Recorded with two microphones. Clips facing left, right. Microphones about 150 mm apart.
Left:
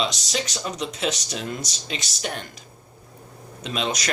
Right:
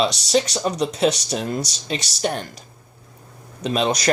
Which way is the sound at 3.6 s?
40° right (ahead or behind).